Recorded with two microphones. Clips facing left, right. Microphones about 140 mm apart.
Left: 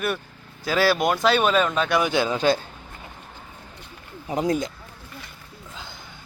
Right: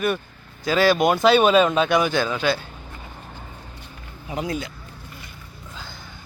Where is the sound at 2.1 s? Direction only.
20° left (ahead or behind).